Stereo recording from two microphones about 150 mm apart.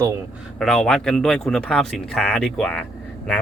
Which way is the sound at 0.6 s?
5° left (ahead or behind).